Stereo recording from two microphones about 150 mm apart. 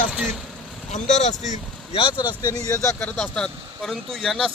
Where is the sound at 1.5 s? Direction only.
40° left (ahead or behind).